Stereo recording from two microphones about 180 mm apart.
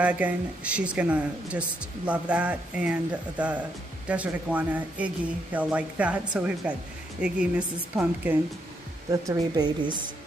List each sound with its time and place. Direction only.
0.0 s speech: 5° right (ahead or behind); by 9.9 s 25° right (ahead or behind)